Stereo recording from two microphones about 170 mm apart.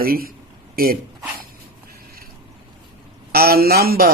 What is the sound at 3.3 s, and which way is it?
Speech, 65° right (ahead or behind).